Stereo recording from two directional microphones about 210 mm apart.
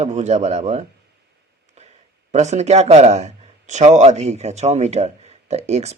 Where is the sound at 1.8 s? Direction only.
30° right (ahead or behind).